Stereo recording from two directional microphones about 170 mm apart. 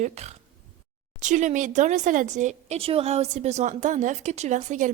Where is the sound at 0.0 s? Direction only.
40° right (ahead or behind).